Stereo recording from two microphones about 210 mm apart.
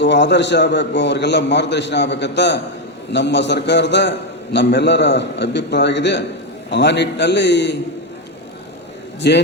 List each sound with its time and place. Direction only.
0.0 s a man's voice: 55° left (ahead or behind)
9.2 s a man's voice: 55° left (ahead or behind)